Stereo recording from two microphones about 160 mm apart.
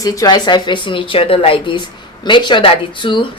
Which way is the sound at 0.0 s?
25° left (ahead or behind).